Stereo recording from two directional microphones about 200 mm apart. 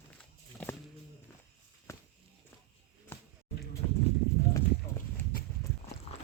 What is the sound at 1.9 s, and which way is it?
Walk, 15° left (ahead or behind).